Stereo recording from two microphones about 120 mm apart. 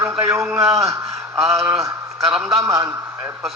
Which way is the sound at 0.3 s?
20° right (ahead or behind).